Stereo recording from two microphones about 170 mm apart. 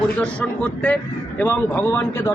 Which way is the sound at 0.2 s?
5° left (ahead or behind).